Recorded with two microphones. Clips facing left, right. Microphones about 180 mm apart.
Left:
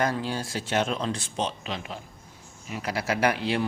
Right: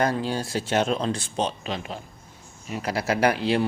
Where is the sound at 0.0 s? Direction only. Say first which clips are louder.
Right 3 dB; 30° right (ahead or behind).